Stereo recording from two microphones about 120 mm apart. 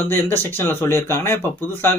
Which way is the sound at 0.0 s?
20° left (ahead or behind).